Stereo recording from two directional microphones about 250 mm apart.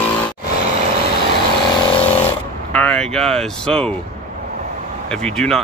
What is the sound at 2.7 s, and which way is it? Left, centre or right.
Speech, centre.